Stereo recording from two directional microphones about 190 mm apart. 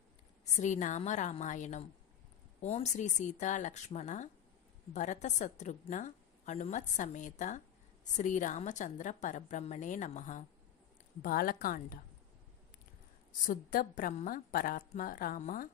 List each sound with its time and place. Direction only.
0.6 s a woman's voice: 40° left (ahead or behind)
13.5 s a woman's voice: 45° left (ahead or behind)